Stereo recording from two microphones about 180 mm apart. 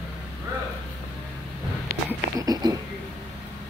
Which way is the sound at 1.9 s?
60° left (ahead or behind).